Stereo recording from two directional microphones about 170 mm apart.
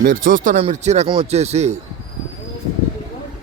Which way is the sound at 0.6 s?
40° right (ahead or behind).